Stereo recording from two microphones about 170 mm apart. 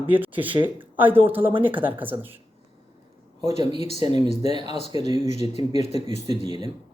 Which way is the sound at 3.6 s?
35° left (ahead or behind).